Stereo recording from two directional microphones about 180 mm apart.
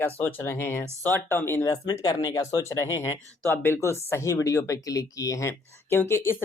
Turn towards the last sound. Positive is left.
turn(degrees=15)  # may be behind; listen again after turning